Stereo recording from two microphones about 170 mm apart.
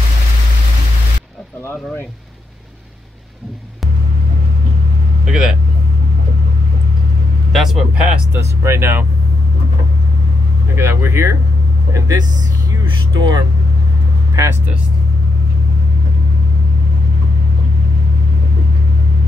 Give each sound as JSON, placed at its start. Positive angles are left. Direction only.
{"t": 5.2, "sound": "speech", "side_deg": -5}
{"t": 7.5, "sound": "speech", "side_deg": 0}
{"t": 8.3, "sound": "speech", "side_deg": -15}
{"t": 10.8, "sound": "speech", "side_deg": -15}